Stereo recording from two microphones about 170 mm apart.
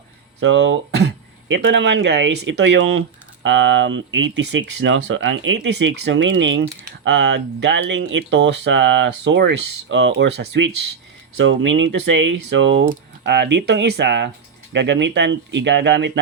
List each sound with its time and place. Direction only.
0.4 s speech: 90° right